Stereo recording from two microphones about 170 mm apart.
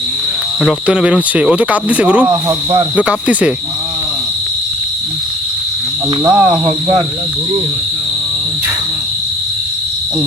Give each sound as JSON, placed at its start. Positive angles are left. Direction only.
{"t": 0.6, "sound": "speech", "side_deg": 0}
{"t": 2.3, "sound": "speech", "side_deg": -20}
{"t": 2.9, "sound": "speech", "side_deg": -5}
{"t": 6.2, "sound": "speech", "side_deg": -20}